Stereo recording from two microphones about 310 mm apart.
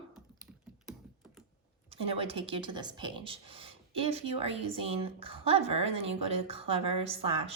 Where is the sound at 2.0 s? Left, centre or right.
Centre.